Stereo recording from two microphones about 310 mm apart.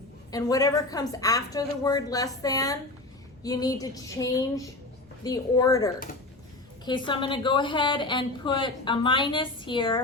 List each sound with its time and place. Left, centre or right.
0.3 s a woman's voice: centre